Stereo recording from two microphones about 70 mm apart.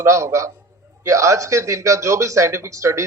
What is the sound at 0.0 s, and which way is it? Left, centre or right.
A man's voice, right.